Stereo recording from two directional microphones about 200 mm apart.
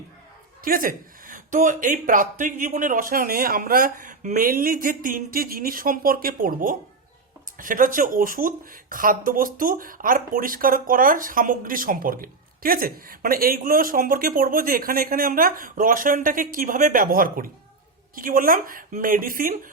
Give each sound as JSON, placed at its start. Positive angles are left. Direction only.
{"t": 0.6, "sound": "speech", "side_deg": -45}